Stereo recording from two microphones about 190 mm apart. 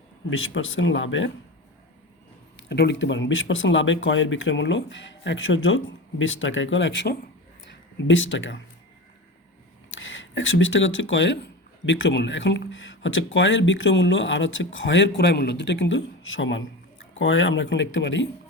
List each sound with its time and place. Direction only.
0.3 s speech: 90° left
2.6 s speech: 65° left (ahead or behind)
9.9 s speech: 90° left; by 18.3 s 75° left (ahead or behind)